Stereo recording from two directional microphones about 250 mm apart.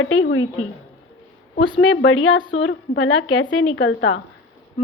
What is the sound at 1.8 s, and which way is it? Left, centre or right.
A woman's voice, left.